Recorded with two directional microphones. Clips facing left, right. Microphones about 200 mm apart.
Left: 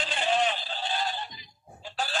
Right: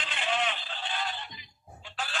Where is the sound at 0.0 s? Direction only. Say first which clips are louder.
Left 5 dB; 35° left (ahead or behind).